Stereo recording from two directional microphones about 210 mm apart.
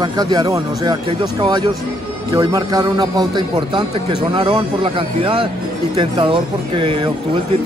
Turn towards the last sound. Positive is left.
turn(degrees=-25)  # may be behind; listen again after turning